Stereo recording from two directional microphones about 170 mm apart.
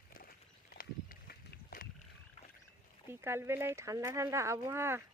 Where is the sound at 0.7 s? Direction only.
60° left (ahead or behind).